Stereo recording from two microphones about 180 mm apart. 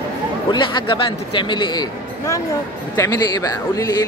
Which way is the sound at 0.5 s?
25° left (ahead or behind).